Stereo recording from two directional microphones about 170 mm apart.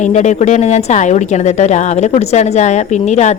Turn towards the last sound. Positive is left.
turn(degrees=40)  # may be behind; listen again after turning